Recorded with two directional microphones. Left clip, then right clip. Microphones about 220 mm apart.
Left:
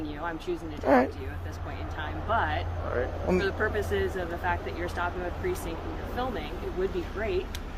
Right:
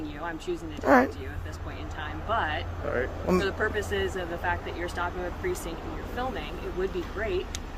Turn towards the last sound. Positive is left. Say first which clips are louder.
# even
turn(degrees=-10)  # may be behind; listen again after turning